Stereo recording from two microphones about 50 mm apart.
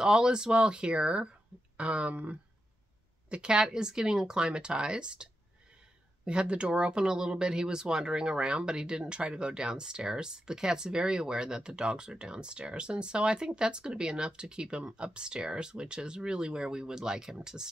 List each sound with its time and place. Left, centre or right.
0.0 s speech: centre